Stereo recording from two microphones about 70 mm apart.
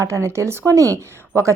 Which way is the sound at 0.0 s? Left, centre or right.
Right.